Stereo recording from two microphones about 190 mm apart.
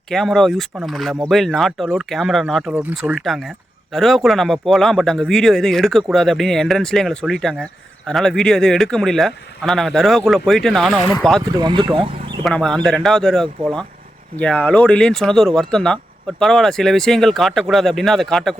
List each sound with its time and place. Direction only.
0.1 s speech: centre (ahead or behind)
11.4 s speech: 25° right (ahead or behind)
12.4 s speech: 5° left (ahead or behind)